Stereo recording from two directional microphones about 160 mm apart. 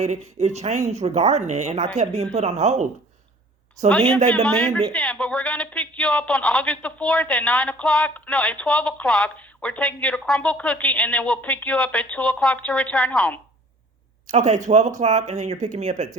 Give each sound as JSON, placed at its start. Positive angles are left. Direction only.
{"t": 0.3, "sound": "speech", "side_deg": -45}
{"t": 4.4, "sound": "a man's voice", "side_deg": 10}
{"t": 14.3, "sound": "speech", "side_deg": -45}